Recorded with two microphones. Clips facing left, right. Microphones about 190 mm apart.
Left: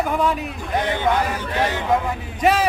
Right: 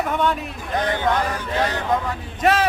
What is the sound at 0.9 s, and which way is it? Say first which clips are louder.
Chant: left 1 dB; 15° left (ahead or behind).